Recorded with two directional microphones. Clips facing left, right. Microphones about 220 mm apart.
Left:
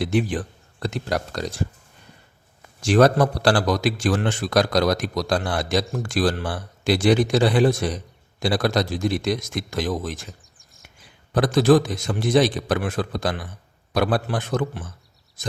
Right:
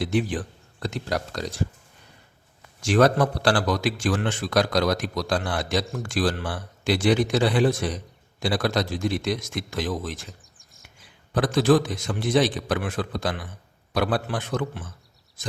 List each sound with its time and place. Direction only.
0.0 s speech: 55° left (ahead or behind)
2.8 s a man's voice: 35° left (ahead or behind)
10.6 s a sound: centre (ahead or behind)
11.3 s a man's voice: 40° left (ahead or behind)